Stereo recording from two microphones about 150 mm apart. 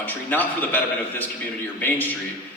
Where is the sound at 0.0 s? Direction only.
10° left (ahead or behind).